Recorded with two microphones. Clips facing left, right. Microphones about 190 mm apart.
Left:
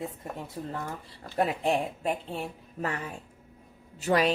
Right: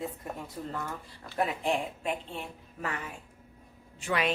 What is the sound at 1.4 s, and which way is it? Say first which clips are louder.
Speech: left 3 dB; 40° left (ahead or behind).